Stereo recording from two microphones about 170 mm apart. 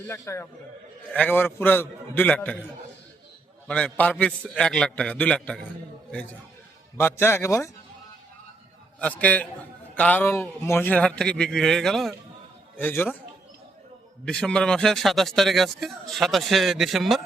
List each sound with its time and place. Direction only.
0.1 s a man's voice: 15° left (ahead or behind)
3.7 s a man's voice: 5° left (ahead or behind)
6.9 s a man's voice: 15° left (ahead or behind)
9.0 s a man's voice: 10° left (ahead or behind)
14.3 s a man's voice: 5° left (ahead or behind)